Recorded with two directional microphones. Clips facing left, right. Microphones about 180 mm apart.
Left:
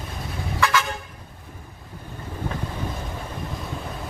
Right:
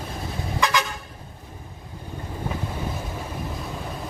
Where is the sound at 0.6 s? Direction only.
15° right (ahead or behind).